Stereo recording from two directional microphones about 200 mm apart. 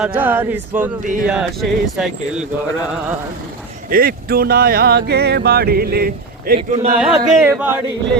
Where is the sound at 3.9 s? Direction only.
45° right (ahead or behind).